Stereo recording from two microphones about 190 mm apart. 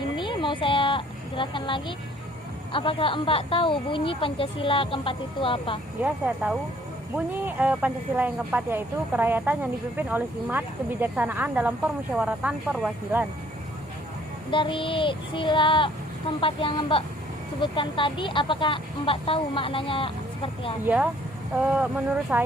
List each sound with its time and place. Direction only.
0.2 s a sound: 25° left (ahead or behind)
2.7 s speech: 25° left (ahead or behind)
6.0 s speech: 10° right (ahead or behind)
14.5 s speech: 25° left (ahead or behind)
20.8 s speech: 5° right (ahead or behind)